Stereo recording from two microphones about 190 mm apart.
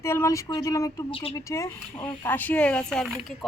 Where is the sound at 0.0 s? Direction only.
15° left (ahead or behind).